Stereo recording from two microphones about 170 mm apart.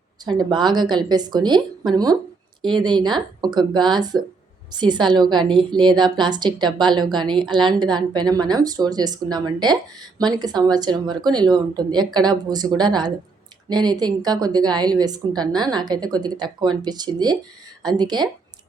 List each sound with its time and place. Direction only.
0.3 s a woman's voice: 25° right (ahead or behind)